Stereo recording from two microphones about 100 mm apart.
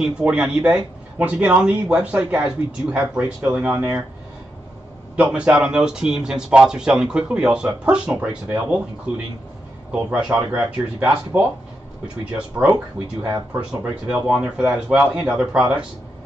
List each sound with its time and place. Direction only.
0.0 s speech: 10° right (ahead or behind)
5.1 s speech: 10° right (ahead or behind)
13.2 s speech: 30° right (ahead or behind)
13.6 s speech: 10° right (ahead or behind)